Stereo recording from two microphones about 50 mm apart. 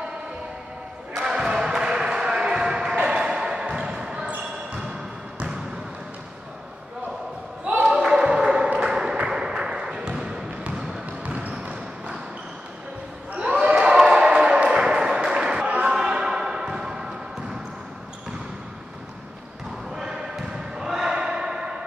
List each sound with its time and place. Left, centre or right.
1.1 s basketball bounce: centre
7.6 s a sound: right
11.2 s basketball bounce: right
13.3 s basketball bounce: right
15.9 s a sound: centre
20.0 s basketball bounce: centre